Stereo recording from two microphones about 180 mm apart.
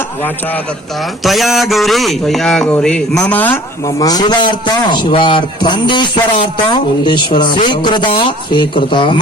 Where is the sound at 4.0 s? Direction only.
20° left (ahead or behind).